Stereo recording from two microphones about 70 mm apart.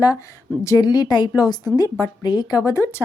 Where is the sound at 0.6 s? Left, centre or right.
Left.